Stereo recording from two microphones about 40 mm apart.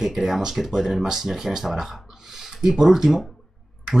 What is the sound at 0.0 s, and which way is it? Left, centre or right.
Speech, centre.